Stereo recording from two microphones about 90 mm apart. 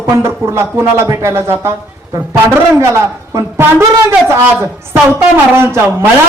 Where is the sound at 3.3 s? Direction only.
40° right (ahead or behind).